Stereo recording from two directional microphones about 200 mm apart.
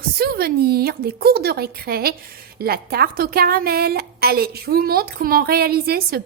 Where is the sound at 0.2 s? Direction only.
50° right (ahead or behind).